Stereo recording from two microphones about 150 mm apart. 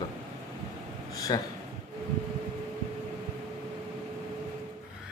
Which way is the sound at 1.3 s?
25° left (ahead or behind).